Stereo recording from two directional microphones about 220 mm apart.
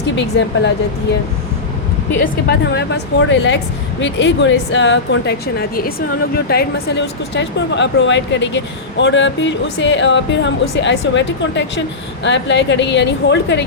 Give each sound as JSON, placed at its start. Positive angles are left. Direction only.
{"t": 0.2, "sound": "a woman's voice", "side_deg": 55}
{"t": 2.2, "sound": "a woman's voice", "side_deg": 40}